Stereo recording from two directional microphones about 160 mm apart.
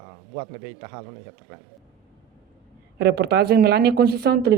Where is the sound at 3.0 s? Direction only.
90° right.